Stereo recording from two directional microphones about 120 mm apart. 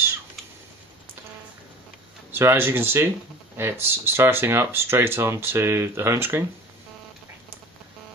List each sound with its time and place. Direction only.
2.3 s speech: 20° right (ahead or behind)